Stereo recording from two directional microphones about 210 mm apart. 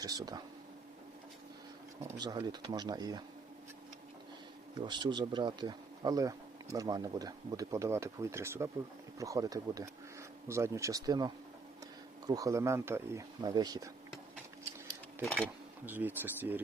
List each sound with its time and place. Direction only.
0.0 s speech: 15° right (ahead or behind)
2.1 s speech: 20° right (ahead or behind)
4.8 s speech: 20° right (ahead or behind)
15.2 s speech: 10° left (ahead or behind)
15.9 s speech: 10° right (ahead or behind)